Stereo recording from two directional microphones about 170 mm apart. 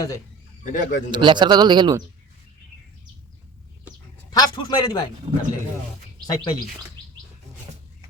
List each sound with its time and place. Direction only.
0.6 s a man's voice: 50° left (ahead or behind)
1.1 s speech: 25° right (ahead or behind)
4.3 s speech: 25° left (ahead or behind)
5.3 s speech: 35° right (ahead or behind)
6.2 s speech: 25° left (ahead or behind)